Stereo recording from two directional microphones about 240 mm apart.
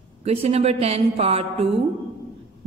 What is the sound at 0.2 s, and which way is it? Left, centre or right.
Speech, right.